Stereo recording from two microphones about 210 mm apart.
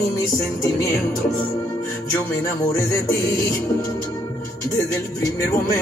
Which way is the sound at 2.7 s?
15° left (ahead or behind).